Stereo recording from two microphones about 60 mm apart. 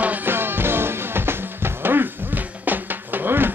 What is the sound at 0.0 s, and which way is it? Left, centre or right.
Music, right.